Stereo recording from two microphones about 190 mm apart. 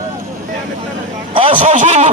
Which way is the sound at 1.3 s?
30° right (ahead or behind).